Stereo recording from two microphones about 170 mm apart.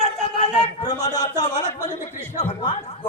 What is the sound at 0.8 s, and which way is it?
Speech, 25° left (ahead or behind).